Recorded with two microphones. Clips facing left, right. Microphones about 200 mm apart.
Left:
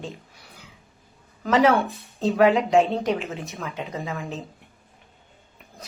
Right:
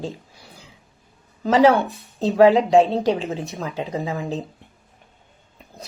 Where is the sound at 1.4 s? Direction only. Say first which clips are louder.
Right 3 dB; 30° right (ahead or behind).